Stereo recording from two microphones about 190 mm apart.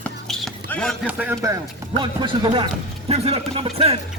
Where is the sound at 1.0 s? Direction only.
10° right (ahead or behind).